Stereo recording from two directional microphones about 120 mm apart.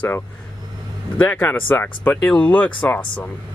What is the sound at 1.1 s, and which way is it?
Speech, 15° left (ahead or behind).